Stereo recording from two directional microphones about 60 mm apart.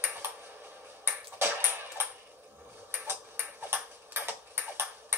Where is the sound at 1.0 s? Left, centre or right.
Right.